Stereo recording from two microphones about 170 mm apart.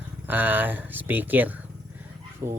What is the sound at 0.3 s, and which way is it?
Speech, 10° right (ahead or behind).